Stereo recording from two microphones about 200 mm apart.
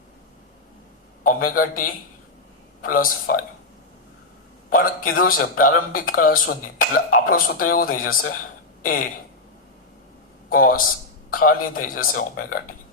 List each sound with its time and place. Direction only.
1.2 s speech: 45° left (ahead or behind)
4.7 s speech: 45° left (ahead or behind)
10.5 s speech: 45° left (ahead or behind)